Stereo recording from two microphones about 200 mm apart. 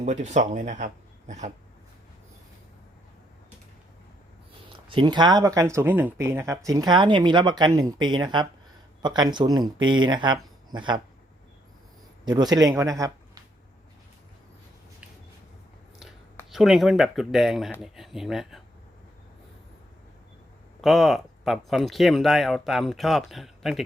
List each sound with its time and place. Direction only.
0.0 s speech: 35° right (ahead or behind)
4.9 s speech: 25° right (ahead or behind)
12.2 s speech: 20° right (ahead or behind)
16.5 s speech: centre (ahead or behind)
20.8 s speech: centre (ahead or behind)